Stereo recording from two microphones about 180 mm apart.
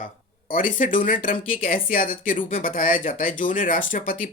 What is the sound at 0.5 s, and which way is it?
Speech, 50° left (ahead or behind).